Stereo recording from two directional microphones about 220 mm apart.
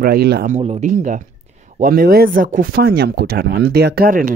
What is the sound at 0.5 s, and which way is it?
Speech, 30° right (ahead or behind).